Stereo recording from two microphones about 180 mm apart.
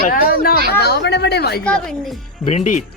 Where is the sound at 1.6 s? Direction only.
5° left (ahead or behind).